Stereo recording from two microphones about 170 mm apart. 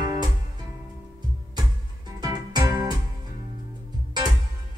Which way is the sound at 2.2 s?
25° right (ahead or behind).